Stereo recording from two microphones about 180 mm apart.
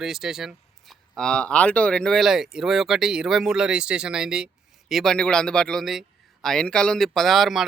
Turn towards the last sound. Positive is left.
turn(degrees=0)  # may be behind; listen again after turning